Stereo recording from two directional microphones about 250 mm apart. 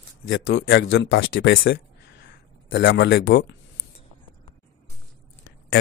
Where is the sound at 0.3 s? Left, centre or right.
Left.